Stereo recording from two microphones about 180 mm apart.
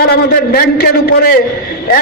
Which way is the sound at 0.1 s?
60° left (ahead or behind).